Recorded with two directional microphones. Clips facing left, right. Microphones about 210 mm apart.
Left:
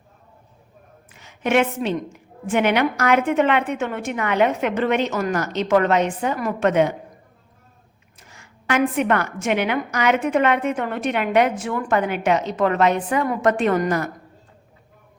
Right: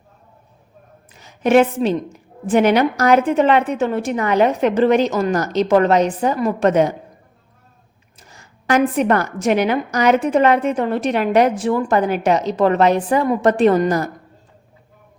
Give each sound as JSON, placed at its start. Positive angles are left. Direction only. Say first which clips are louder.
{"t": 1.2, "sound": "a woman's voice", "louder": "right 6 dB", "side_deg": -35}
{"t": 8.3, "sound": "a woman's voice", "louder": "right 5 dB", "side_deg": -35}
{"t": 13.2, "sound": "a woman's voice", "louder": "right 4 dB", "side_deg": -25}
{"t": 13.5, "sound": "a woman's voice", "louder": "right 5 dB", "side_deg": -35}